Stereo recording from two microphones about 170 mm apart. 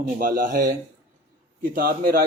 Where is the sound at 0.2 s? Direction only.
55° right (ahead or behind).